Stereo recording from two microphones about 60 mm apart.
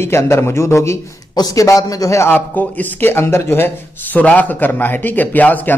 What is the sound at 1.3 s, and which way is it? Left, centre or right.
Speech, left.